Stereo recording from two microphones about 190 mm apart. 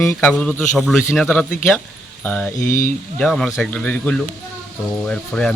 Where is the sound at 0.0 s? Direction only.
5° left (ahead or behind).